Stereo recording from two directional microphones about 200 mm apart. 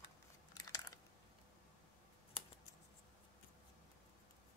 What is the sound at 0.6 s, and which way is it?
Chewing, 15° left (ahead or behind).